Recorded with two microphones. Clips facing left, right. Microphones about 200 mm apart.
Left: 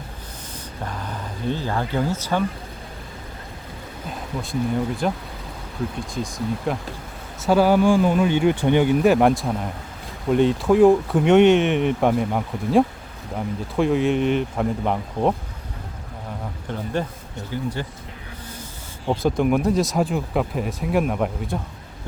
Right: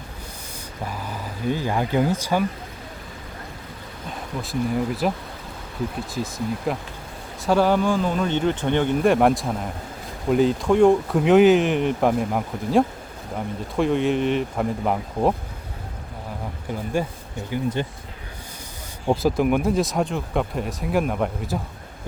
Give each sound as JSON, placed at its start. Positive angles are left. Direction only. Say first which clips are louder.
{"t": 0.9, "sound": "speech", "louder": "even", "side_deg": -10}
{"t": 4.4, "sound": "speech", "louder": "even", "side_deg": 0}
{"t": 6.1, "sound": "speech", "louder": "left 1 dB", "side_deg": -5}
{"t": 16.6, "sound": "a sound", "louder": "right 1 dB", "side_deg": -10}
{"t": 17.5, "sound": "speech", "louder": "right 3 dB", "side_deg": -20}
{"t": 19.0, "sound": "speech", "louder": "even", "side_deg": -5}